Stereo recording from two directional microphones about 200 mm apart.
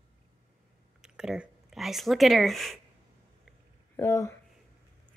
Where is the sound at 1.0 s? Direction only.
5° right (ahead or behind).